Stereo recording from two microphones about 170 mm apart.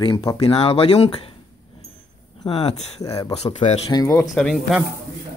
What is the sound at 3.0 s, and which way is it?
Speech, 20° left (ahead or behind).